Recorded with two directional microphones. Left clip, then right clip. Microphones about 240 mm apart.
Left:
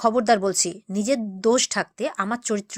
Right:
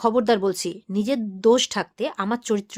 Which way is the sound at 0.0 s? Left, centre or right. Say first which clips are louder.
Left 1 dB; centre.